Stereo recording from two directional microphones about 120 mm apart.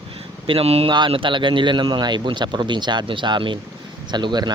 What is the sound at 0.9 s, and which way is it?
Speech, 45° right (ahead or behind).